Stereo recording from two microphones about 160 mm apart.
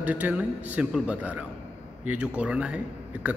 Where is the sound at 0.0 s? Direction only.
10° right (ahead or behind).